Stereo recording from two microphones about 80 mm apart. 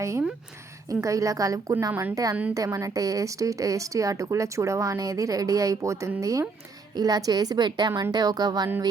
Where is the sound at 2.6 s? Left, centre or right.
Right.